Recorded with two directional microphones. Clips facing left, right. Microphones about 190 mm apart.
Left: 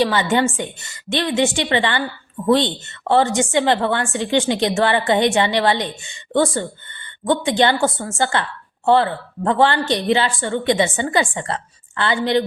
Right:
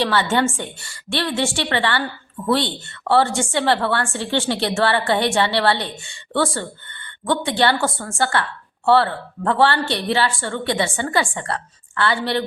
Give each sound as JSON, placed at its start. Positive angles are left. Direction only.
{"t": 0.0, "sound": "a woman's voice", "side_deg": 15}